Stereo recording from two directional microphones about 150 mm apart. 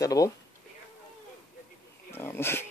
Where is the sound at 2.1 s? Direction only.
15° left (ahead or behind).